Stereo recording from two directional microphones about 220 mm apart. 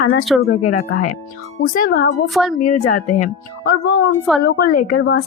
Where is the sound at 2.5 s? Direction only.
35° left (ahead or behind).